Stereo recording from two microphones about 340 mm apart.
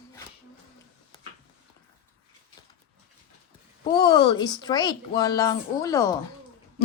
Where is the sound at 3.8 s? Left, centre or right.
Centre.